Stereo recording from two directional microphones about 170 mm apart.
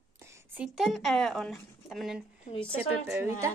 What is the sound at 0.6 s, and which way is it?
Speech, centre (ahead or behind).